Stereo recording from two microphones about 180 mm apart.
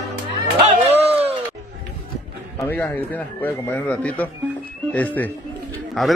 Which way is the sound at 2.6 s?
10° left (ahead or behind).